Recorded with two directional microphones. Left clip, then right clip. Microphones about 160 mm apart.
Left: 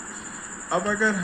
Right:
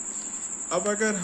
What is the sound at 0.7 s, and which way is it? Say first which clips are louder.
Speech: left 3 dB; 40° right (ahead or behind).